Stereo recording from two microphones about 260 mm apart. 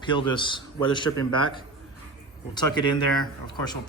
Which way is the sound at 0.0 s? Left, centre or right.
Centre.